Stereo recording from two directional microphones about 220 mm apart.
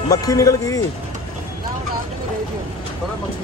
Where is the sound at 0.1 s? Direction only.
15° left (ahead or behind).